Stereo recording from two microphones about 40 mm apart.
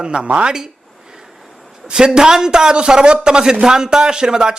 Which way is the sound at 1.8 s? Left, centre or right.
Centre.